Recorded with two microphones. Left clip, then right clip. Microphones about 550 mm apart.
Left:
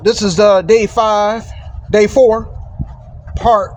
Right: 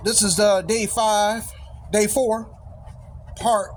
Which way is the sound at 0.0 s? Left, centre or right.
Centre.